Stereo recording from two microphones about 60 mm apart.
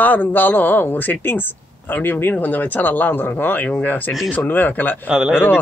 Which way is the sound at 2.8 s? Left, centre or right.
Left.